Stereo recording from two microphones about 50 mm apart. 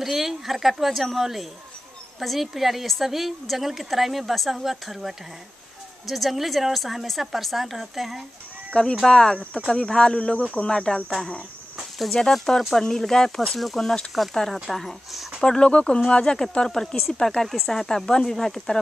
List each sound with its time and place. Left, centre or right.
0.0 s a woman's voice: centre
8.6 s a sound: centre
9.0 s speech: centre
12.0 s a woman's voice: centre
15.4 s speech: centre